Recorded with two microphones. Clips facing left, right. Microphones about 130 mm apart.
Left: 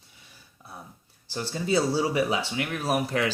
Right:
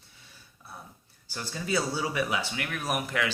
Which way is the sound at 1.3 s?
25° left (ahead or behind).